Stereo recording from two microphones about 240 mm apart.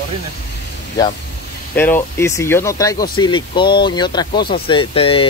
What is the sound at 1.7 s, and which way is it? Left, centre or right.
Speech, centre.